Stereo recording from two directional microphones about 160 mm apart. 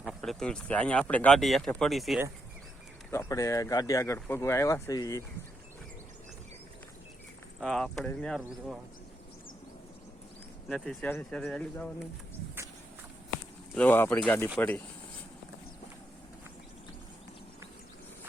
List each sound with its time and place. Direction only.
0.0 s speech: centre (ahead or behind)
3.1 s speech: 20° left (ahead or behind)
7.6 s speech: 5° left (ahead or behind)
10.7 s speech: 5° left (ahead or behind)
13.7 s speech: 10° left (ahead or behind)